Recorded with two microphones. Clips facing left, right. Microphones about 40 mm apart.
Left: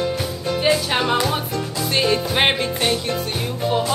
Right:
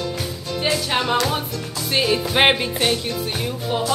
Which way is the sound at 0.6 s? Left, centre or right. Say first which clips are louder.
Left 2 dB; centre.